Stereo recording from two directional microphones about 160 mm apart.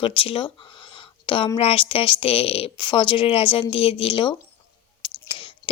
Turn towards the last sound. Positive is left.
turn(degrees=30)  # may be behind; listen again after turning